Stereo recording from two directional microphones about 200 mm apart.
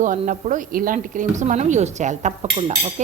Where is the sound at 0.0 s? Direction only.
40° right (ahead or behind).